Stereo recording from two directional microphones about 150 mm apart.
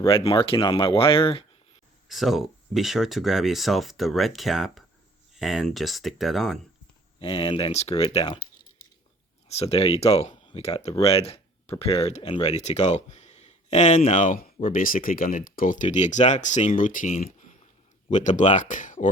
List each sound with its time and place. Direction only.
0.0 s speech: 35° left (ahead or behind)
2.0 s speech: centre (ahead or behind)
7.2 s speech: 35° left (ahead or behind)
9.5 s speech: 40° left (ahead or behind); by 19.0 s 60° left (ahead or behind)